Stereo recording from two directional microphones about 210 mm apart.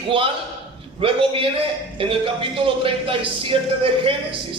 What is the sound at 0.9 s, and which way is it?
Speech, 25° right (ahead or behind).